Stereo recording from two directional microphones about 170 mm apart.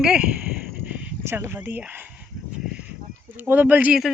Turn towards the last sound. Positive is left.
turn(degrees=-5)  # may be behind; listen again after turning